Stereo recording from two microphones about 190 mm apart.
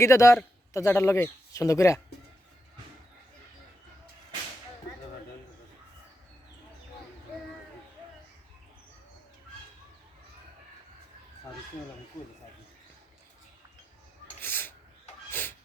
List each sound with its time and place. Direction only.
0.0 s speech: 15° left (ahead or behind)
14.4 s a sound: 10° left (ahead or behind)
15.3 s music: 10° left (ahead or behind)